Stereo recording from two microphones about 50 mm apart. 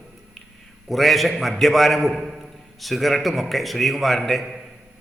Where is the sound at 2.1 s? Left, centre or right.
Centre.